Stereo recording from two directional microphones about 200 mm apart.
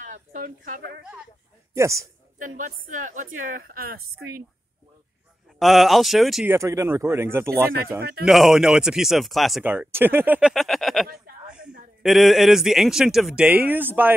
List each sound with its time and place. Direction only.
0.0 s speech: 40° right (ahead or behind)
1.8 s speech: 15° right (ahead or behind)
2.3 s a woman's voice: 40° right (ahead or behind)
5.6 s speech: centre (ahead or behind)
6.5 s speech: 15° right (ahead or behind)
8.0 s a woman's voice: 50° right (ahead or behind)
8.3 s speech: centre (ahead or behind)
10.5 s a sound: centre (ahead or behind)
11.6 s a sound: 45° right (ahead or behind)
12.0 s speech: centre (ahead or behind)